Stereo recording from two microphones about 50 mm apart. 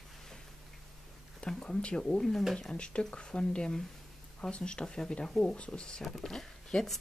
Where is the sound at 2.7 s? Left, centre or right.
Left.